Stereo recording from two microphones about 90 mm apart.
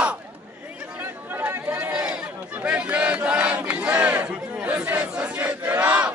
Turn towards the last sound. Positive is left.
turn(degrees=-15)  # may be behind; listen again after turning